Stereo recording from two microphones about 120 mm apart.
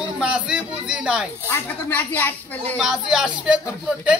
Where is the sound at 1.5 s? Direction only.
15° left (ahead or behind).